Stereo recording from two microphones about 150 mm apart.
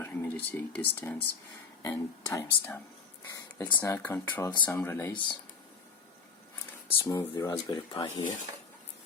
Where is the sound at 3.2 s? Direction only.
15° left (ahead or behind).